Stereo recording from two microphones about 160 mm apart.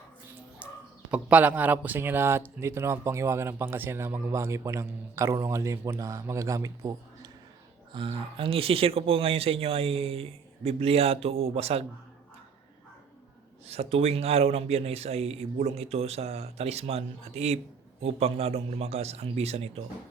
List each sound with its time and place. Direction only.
0.6 s a sound: 10° right (ahead or behind)
1.1 s speech: 10° right (ahead or behind)
7.9 s speech: 35° right (ahead or behind)
13.7 s speech: 40° right (ahead or behind)